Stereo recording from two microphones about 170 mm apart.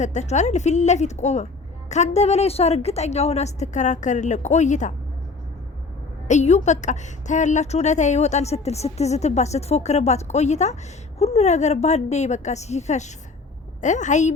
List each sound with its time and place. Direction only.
0.0 s a woman's voice: 45° left (ahead or behind)
6.2 s a woman's voice: 40° left (ahead or behind)